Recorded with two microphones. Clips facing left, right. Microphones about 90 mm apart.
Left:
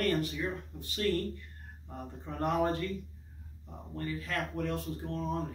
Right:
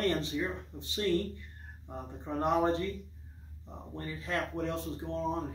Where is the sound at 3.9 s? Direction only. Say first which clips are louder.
Even; 20° right (ahead or behind).